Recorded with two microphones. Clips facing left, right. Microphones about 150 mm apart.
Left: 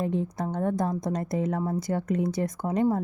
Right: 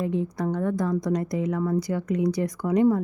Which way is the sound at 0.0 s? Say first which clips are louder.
Right 2 dB; 45° left (ahead or behind).